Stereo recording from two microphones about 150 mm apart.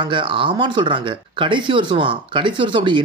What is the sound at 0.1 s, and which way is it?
A man's voice, 30° right (ahead or behind).